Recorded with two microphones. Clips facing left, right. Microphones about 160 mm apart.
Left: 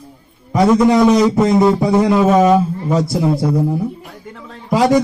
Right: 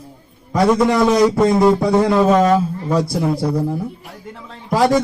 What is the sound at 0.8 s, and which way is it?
Speech, 20° left (ahead or behind).